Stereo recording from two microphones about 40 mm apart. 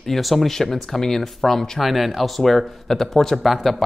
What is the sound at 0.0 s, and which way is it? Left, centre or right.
Speech, centre.